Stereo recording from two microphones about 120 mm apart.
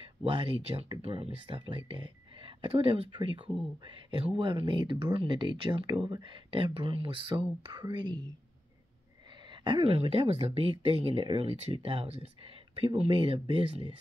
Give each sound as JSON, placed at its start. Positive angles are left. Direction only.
{"t": 0.2, "sound": "speech", "side_deg": -50}
{"t": 9.5, "sound": "a sound", "side_deg": -40}
{"t": 9.9, "sound": "speech", "side_deg": -55}